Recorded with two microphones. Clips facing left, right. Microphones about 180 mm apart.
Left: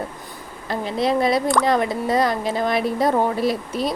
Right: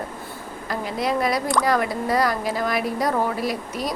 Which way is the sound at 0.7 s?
25° left (ahead or behind).